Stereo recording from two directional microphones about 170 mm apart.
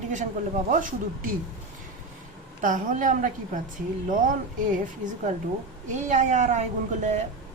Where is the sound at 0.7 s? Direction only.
50° right (ahead or behind).